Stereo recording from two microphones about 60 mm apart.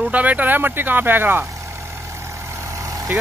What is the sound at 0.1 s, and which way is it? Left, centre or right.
Speech, right.